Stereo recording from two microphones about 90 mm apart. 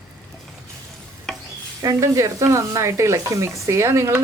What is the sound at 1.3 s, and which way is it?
Stir, 5° left (ahead or behind).